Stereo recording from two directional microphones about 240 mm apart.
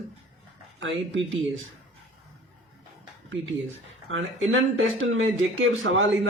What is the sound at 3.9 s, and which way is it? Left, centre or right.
A man's voice, right.